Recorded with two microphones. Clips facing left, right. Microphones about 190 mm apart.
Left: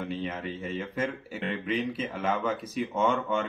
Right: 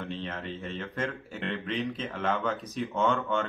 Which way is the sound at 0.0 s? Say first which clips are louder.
Left 3 dB; 10° left (ahead or behind).